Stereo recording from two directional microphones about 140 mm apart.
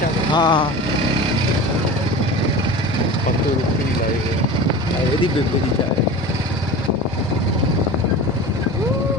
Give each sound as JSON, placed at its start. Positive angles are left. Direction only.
{"t": 0.3, "sound": "speech", "side_deg": 30}